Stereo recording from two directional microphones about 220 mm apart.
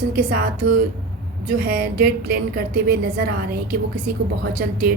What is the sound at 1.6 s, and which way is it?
Speech, 45° right (ahead or behind).